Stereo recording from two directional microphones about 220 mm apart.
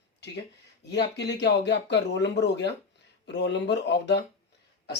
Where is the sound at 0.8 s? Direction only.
50° left (ahead or behind).